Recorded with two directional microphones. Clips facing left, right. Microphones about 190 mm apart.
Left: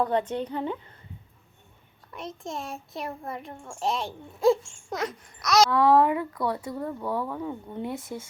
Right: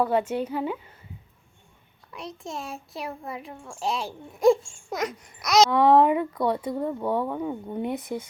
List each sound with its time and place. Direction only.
0.0 s a woman's voice: 10° right (ahead or behind)
2.1 s a child's voice: centre (ahead or behind); by 8.3 s 20° right (ahead or behind)